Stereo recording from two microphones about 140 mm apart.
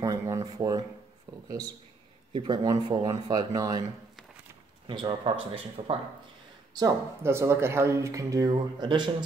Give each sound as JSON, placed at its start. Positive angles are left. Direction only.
{"t": 0.0, "sound": "a sound", "side_deg": -25}
{"t": 1.3, "sound": "speech", "side_deg": -25}
{"t": 4.8, "sound": "speech", "side_deg": -35}
{"t": 6.7, "sound": "speech", "side_deg": -20}